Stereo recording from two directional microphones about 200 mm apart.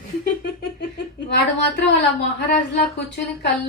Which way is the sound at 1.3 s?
60° left (ahead or behind).